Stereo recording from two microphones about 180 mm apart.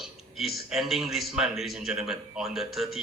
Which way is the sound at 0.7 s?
Centre (ahead or behind).